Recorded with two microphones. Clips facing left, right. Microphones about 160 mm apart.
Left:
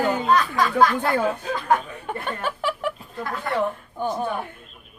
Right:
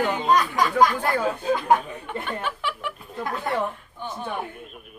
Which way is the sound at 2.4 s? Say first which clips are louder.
Left 3 dB; 40° left (ahead or behind).